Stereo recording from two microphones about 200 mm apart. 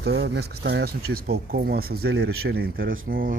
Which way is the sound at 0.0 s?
55° right (ahead or behind).